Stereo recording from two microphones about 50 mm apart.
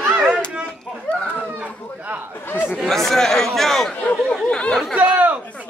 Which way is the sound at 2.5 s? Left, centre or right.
Left.